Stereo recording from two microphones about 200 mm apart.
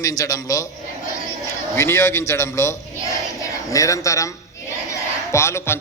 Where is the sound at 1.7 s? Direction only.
15° left (ahead or behind).